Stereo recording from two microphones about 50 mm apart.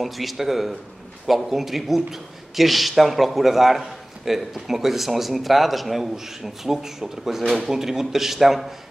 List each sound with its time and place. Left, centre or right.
0.0 s a man's voice: centre